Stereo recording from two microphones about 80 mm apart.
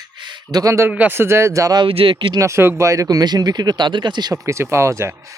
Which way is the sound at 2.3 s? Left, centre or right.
Right.